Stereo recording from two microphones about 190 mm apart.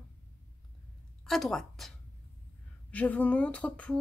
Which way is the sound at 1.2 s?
Centre (ahead or behind).